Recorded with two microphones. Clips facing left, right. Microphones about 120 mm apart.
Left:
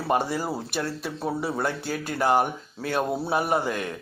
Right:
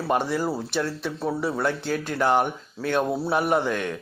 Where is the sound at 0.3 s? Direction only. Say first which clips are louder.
Right 3 dB; 15° left (ahead or behind).